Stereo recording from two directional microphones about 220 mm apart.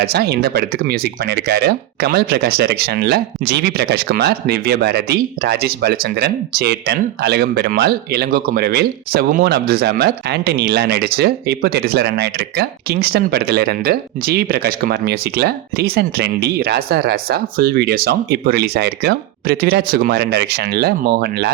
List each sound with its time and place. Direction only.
0.0 s speech: 45° right (ahead or behind)